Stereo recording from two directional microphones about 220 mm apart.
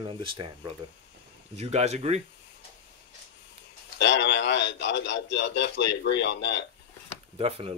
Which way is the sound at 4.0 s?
55° left (ahead or behind).